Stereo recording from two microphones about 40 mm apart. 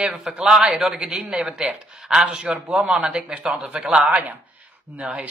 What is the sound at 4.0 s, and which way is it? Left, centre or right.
Speech, right.